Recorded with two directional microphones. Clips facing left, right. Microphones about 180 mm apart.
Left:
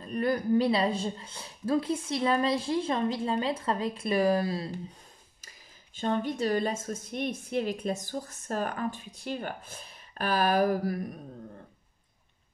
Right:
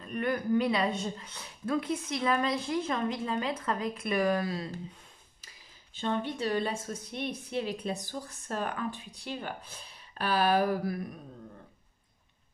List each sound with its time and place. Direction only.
0.0 s speech: 35° left (ahead or behind)
5.9 s a woman's voice: 45° left (ahead or behind)